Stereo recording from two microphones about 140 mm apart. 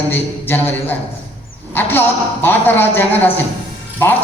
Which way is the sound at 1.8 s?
15° left (ahead or behind).